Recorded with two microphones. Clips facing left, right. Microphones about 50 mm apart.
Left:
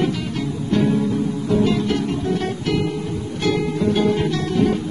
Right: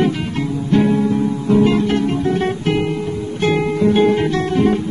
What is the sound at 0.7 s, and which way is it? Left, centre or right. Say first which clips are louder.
Music: right 4 dB; right.